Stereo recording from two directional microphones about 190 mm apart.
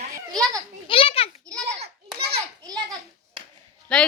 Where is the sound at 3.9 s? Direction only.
5° left (ahead or behind).